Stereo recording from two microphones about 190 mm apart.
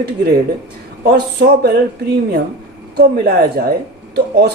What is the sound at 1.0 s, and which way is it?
Speech, 55° right (ahead or behind).